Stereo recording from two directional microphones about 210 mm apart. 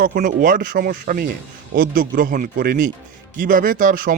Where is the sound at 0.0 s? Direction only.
40° right (ahead or behind).